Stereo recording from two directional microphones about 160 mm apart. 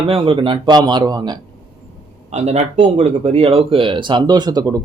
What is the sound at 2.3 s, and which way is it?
Speech, 45° right (ahead or behind).